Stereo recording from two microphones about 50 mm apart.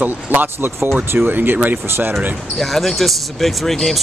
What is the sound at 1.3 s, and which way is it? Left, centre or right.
Speech, right.